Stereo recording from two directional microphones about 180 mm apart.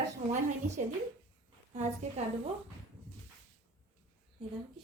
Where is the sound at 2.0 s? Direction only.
40° right (ahead or behind).